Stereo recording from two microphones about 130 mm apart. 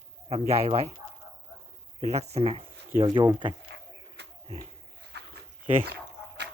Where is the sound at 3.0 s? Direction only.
35° right (ahead or behind).